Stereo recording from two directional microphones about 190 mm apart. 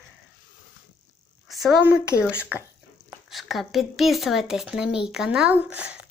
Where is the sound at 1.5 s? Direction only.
Centre (ahead or behind).